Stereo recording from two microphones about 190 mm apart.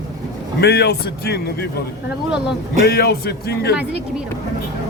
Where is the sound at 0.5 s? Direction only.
60° left (ahead or behind).